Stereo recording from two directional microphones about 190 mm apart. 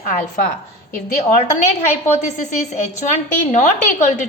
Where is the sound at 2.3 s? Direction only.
40° left (ahead or behind).